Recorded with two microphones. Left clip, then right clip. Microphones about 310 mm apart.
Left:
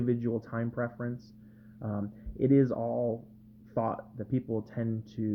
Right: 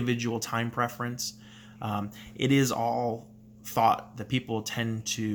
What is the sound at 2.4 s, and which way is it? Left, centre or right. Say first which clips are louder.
Speech: right 1 dB; centre.